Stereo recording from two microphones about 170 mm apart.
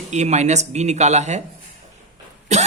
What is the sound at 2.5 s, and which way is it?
Speech, 40° right (ahead or behind).